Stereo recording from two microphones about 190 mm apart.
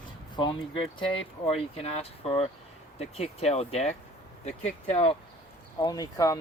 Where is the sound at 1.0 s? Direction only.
30° left (ahead or behind).